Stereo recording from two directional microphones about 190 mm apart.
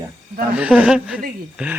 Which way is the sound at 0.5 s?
5° right (ahead or behind).